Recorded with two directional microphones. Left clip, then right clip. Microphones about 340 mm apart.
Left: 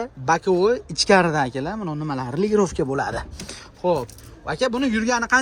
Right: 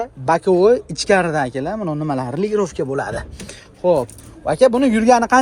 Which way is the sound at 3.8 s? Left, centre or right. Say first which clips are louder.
Right 6 dB; centre.